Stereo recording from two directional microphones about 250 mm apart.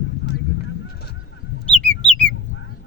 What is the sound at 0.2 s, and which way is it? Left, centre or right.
Honk, left.